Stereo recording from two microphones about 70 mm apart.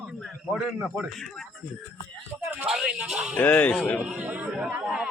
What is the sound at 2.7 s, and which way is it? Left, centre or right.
Speech, centre.